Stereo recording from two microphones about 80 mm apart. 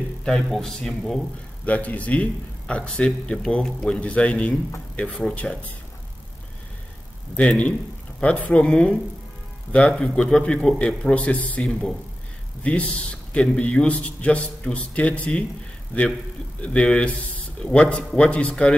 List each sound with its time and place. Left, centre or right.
0.2 s a man's voice: centre
1.7 s a man's voice: centre
7.3 s a man's voice: centre
16.6 s a man's voice: centre